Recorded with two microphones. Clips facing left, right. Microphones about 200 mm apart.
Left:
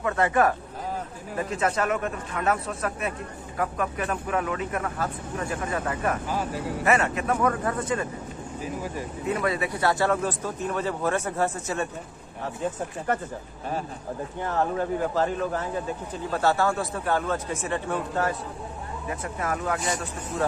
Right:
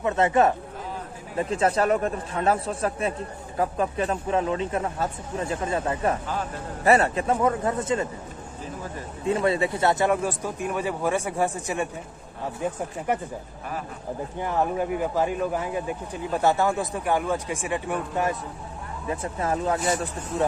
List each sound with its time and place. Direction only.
0.0 s speech: 20° right (ahead or behind)
9.2 s speech: 25° right (ahead or behind)
14.4 s speech: 15° right (ahead or behind)
19.0 s speech: 25° right (ahead or behind)